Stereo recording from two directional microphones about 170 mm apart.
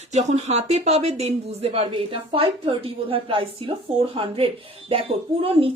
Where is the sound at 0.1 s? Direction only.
40° right (ahead or behind).